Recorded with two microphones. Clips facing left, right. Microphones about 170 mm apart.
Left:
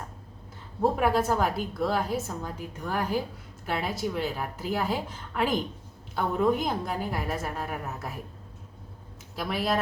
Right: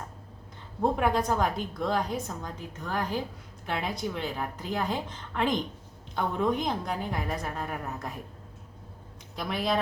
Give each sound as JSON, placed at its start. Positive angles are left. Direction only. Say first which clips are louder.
{"t": 0.8, "sound": "a woman's voice", "louder": "left 2 dB", "side_deg": 5}
{"t": 9.3, "sound": "a woman's voice", "louder": "left 1 dB", "side_deg": 5}